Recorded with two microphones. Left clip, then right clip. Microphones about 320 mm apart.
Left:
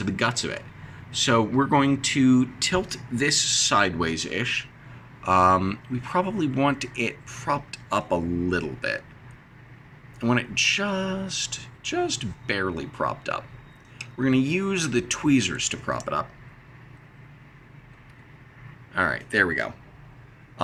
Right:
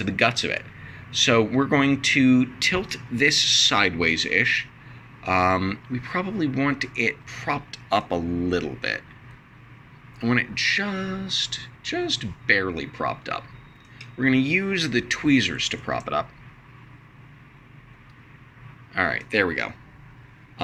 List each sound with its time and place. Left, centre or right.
0.0 s speech: centre
10.2 s speech: centre
18.9 s speech: centre